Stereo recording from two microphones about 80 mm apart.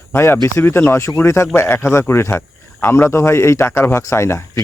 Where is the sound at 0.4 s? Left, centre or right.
Left.